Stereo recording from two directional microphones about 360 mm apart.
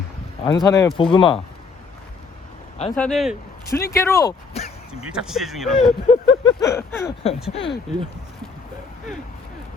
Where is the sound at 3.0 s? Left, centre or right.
Centre.